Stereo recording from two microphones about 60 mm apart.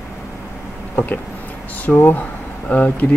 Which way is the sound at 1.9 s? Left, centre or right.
Left.